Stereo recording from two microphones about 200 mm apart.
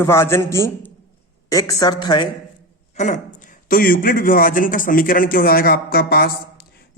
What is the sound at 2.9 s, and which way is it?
A man's voice, 35° left (ahead or behind).